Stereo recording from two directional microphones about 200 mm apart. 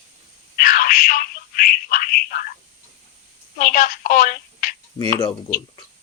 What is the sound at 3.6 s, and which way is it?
A woman's voice, 40° left (ahead or behind).